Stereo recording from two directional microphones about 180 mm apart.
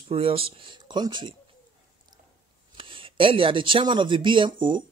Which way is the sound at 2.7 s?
30° right (ahead or behind).